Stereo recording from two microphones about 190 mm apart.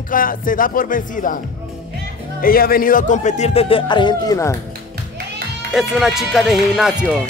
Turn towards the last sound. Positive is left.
turn(degrees=-5)  # may be behind; listen again after turning